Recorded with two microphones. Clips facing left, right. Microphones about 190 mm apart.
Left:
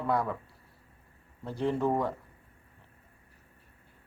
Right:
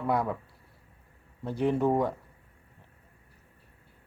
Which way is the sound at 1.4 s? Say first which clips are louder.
Right 3 dB; 15° right (ahead or behind).